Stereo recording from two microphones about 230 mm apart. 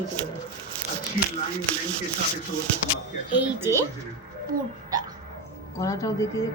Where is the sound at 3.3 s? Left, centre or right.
Centre.